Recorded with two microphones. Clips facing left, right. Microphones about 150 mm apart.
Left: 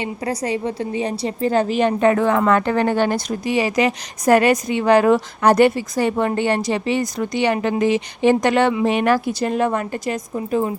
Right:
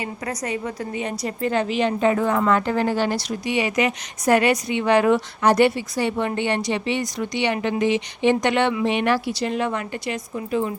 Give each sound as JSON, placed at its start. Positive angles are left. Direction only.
{"t": 0.0, "sound": "a woman's voice", "side_deg": 30}
{"t": 2.4, "sound": "speech", "side_deg": 60}